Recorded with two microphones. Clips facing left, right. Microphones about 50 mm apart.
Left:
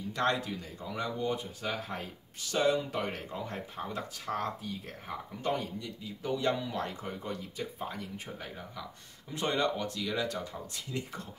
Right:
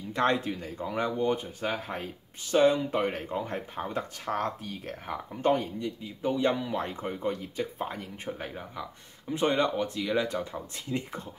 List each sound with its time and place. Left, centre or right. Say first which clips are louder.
0.1 s speech: right 4 dB; right